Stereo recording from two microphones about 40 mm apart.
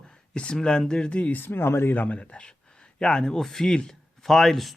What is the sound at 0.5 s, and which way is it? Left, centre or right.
Speech, centre.